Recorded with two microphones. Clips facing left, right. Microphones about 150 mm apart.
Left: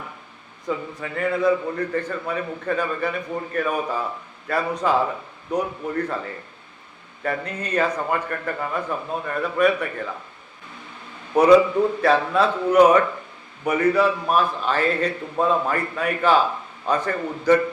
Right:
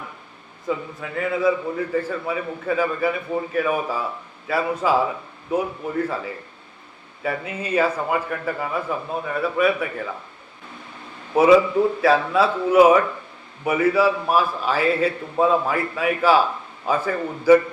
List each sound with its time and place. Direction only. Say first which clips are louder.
0.7 s a man's voice: right 1 dB; centre (ahead or behind)
11.3 s a man's voice: even; 5° right (ahead or behind)